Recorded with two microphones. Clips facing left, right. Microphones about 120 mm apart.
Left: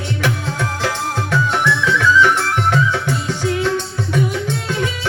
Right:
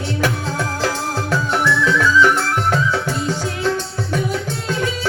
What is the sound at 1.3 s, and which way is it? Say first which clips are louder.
Music: left 1 dB; 40° right (ahead or behind).